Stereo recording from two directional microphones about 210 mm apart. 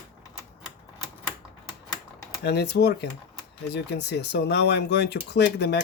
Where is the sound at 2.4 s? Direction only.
50° left (ahead or behind).